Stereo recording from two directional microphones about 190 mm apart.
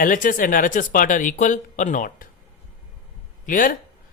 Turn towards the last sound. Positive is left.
turn(degrees=45)  # may be behind; listen again after turning